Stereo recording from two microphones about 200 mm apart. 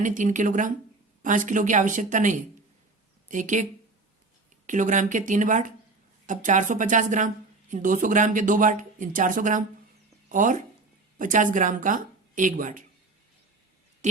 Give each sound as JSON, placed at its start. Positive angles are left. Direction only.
{"t": 0.0, "sound": "speech", "side_deg": -40}
{"t": 14.0, "sound": "speech", "side_deg": -35}